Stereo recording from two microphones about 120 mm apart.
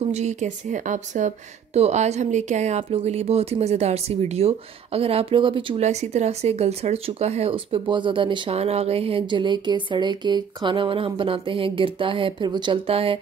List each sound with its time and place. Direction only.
0.0 s speech: 65° right (ahead or behind); by 5.8 s 45° right (ahead or behind)
5.8 s speech: 70° right (ahead or behind); by 8.5 s 45° right (ahead or behind)
8.5 s speech: 60° right (ahead or behind)